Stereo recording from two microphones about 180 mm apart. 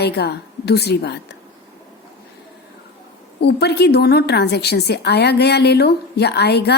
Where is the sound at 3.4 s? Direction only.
65° left (ahead or behind).